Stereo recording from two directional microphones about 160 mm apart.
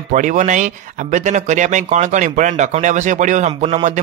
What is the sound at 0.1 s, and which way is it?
Speech, 55° right (ahead or behind).